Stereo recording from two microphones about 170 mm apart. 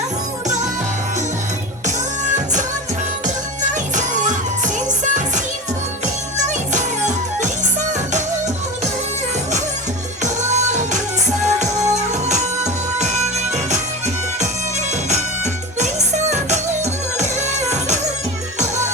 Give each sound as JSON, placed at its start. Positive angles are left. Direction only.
{"t": 2.3, "sound": "music", "side_deg": -45}
{"t": 3.9, "sound": "music", "side_deg": -45}
{"t": 10.2, "sound": "music", "side_deg": -45}
{"t": 16.3, "sound": "music", "side_deg": -40}